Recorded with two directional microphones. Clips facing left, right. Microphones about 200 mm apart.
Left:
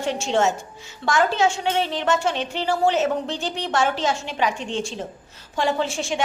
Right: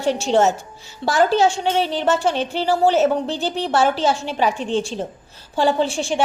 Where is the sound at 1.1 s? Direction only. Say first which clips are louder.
Right 4 dB; 35° right (ahead or behind).